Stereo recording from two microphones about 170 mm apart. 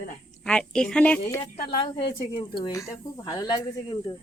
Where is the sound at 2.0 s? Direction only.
75° left (ahead or behind).